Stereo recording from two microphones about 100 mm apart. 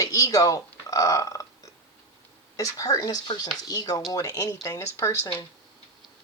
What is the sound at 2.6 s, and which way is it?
A woman's voice, 35° left (ahead or behind).